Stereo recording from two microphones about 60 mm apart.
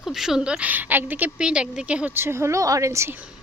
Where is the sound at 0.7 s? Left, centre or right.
Right.